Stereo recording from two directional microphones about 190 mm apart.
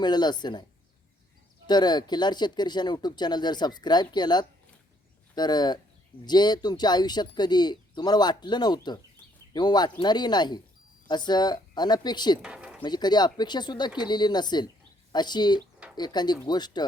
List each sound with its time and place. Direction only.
0.0 s speech: 20° left (ahead or behind)
1.6 s speech: 20° left (ahead or behind)
12.4 s a sound: 5° right (ahead or behind)
12.8 s speech: 20° left (ahead or behind)